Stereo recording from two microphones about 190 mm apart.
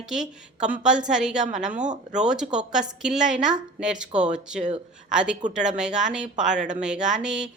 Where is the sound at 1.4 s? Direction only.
40° right (ahead or behind).